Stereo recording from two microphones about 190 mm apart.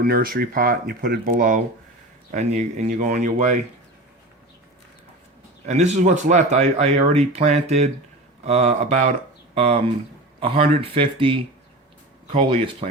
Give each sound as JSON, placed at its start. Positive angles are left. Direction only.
{"t": 0.0, "sound": "speech", "side_deg": -50}
{"t": 5.6, "sound": "speech", "side_deg": -35}
{"t": 10.4, "sound": "speech", "side_deg": -30}